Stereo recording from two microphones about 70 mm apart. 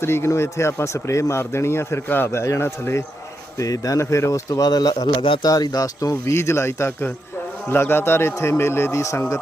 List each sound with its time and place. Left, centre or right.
0.0 s a man's voice: left
3.6 s speech: left
6.3 s a man's voice: left